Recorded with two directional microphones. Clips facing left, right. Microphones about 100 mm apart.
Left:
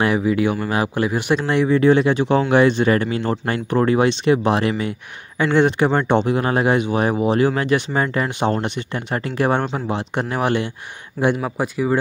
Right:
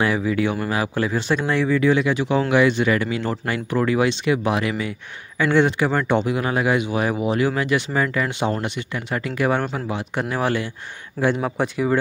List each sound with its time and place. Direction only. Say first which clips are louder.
0.0 s speech: left 3 dB; 20° left (ahead or behind)
1.8 s speech: left 4 dB; 35° left (ahead or behind)
5.4 s speech: left 2 dB; 20° left (ahead or behind)
11.4 s speech: even; 5° left (ahead or behind)